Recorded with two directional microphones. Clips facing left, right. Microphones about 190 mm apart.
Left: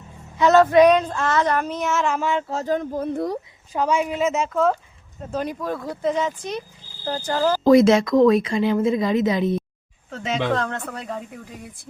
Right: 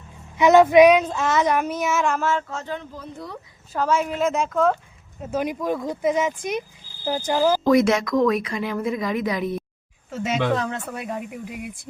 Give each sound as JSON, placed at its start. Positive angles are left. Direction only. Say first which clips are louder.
{"t": 0.3, "sound": "speech", "louder": "right 1 dB", "side_deg": -15}
{"t": 0.9, "sound": "child singing", "louder": "right 1 dB", "side_deg": -5}
{"t": 2.5, "sound": "speech", "louder": "left 8 dB", "side_deg": 40}
{"t": 3.7, "sound": "child singing", "louder": "left 1 dB", "side_deg": 15}
{"t": 5.2, "sound": "speech", "louder": "right 2 dB", "side_deg": -10}
{"t": 7.6, "sound": "speech", "louder": "left 4 dB", "side_deg": 30}
{"t": 10.1, "sound": "speech", "louder": "right 1 dB", "side_deg": -5}